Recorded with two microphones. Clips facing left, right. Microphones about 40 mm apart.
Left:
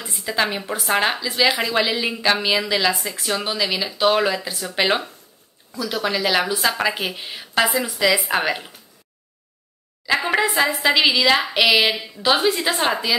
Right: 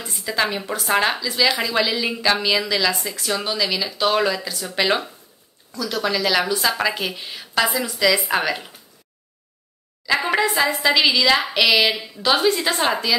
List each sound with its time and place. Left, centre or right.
0.0 s a woman's voice: centre
2.1 s a woman's voice: centre
10.0 s a woman's voice: centre